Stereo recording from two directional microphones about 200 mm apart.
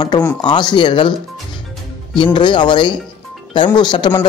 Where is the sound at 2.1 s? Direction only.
25° left (ahead or behind).